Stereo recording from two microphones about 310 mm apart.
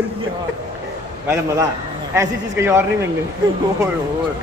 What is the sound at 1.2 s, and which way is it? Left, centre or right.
A man's voice, centre.